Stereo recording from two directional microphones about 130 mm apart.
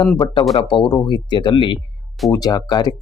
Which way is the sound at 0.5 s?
40° left (ahead or behind).